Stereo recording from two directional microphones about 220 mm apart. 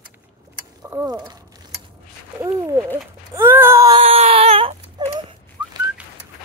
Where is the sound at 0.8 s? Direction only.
15° right (ahead or behind).